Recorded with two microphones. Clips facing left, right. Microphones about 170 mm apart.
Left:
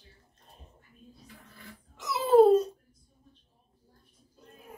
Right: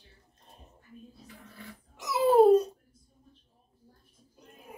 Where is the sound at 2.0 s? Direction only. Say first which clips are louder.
Left 1 dB; 15° right (ahead or behind).